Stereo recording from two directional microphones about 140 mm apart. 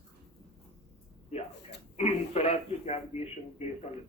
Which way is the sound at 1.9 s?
50° left (ahead or behind).